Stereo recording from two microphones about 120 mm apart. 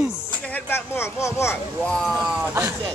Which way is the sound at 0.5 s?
20° left (ahead or behind).